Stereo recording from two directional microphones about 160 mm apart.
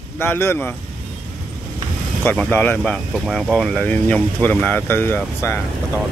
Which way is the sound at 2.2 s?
10° left (ahead or behind).